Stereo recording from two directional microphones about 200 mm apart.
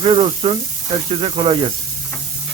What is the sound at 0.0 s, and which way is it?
Speech, 30° right (ahead or behind).